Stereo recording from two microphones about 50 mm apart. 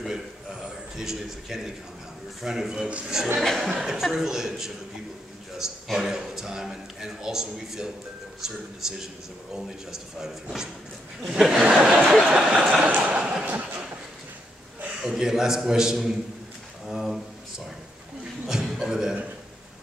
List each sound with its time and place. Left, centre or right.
0.0 s a sound: centre
2.4 s a man's voice: centre
2.9 s a man's voice: right
3.4 s speech: centre
3.7 s a man's voice: centre
12.8 s a sound: right
15.0 s a man's voice: centre
16.8 s a sound: centre
18.5 s chuckle: centre